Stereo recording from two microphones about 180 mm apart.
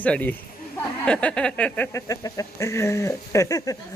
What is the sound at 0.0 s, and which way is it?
Speech, 10° left (ahead or behind).